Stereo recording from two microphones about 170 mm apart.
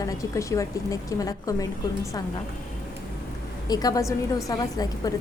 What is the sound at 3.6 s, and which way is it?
A woman's voice, 20° left (ahead or behind).